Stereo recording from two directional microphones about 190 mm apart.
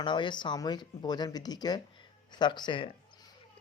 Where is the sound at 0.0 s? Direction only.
25° left (ahead or behind).